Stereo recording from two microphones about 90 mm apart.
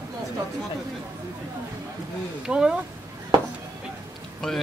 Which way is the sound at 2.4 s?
10° right (ahead or behind).